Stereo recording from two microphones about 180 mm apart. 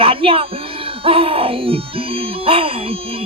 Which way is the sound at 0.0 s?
30° right (ahead or behind).